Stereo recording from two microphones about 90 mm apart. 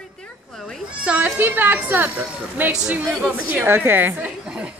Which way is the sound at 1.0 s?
15° right (ahead or behind).